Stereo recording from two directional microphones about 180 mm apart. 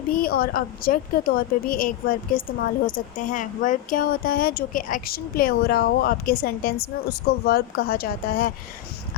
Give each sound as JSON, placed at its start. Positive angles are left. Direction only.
{"t": 0.1, "sound": "a woman's voice", "side_deg": 55}